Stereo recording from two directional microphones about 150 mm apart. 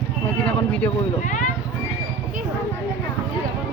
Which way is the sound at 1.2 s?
60° left (ahead or behind).